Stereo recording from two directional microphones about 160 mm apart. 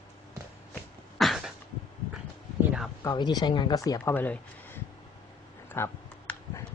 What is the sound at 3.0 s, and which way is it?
Speech, 25° left (ahead or behind).